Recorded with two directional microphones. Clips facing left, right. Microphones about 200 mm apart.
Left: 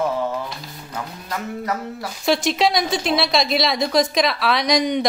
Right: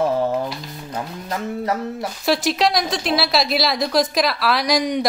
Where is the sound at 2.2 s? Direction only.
Centre (ahead or behind).